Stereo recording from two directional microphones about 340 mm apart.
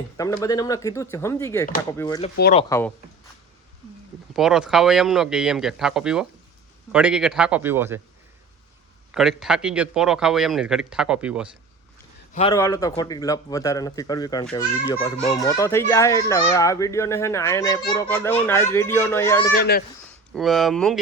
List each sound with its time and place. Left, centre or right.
0.2 s a child's voice: centre
2.3 s speech: left
2.6 s a child's voice: centre
4.4 s a man's voice: centre
9.1 s a man's voice: centre
12.3 s a child's voice: centre
19.5 s speech: left
20.3 s a man's voice: centre